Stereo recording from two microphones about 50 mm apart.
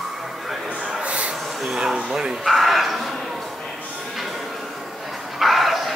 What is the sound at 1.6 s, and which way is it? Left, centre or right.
Speech, centre.